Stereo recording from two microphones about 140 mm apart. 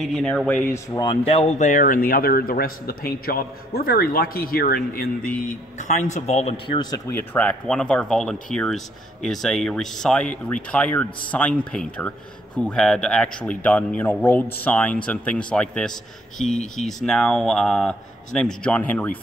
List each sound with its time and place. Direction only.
0.0 s speech: 5° left (ahead or behind)
0.9 s speech: 35° left (ahead or behind)
1.7 s a man's voice: 75° left (ahead or behind); by 6.8 s 45° left (ahead or behind)
7.1 s speech: 15° left (ahead or behind)